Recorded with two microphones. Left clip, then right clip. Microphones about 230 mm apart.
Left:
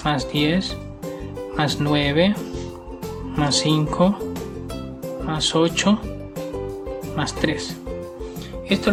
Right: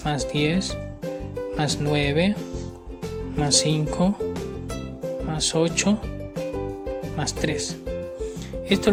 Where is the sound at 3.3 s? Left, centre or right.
Left.